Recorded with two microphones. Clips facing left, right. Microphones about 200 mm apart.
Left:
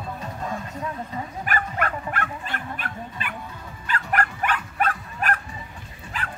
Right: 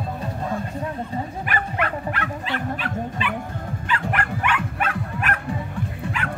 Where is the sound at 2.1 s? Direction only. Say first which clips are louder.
Right 3 dB; 50° left (ahead or behind).